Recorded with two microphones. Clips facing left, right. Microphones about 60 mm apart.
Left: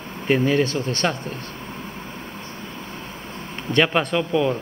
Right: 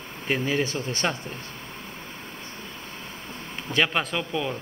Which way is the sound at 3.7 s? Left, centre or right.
Centre.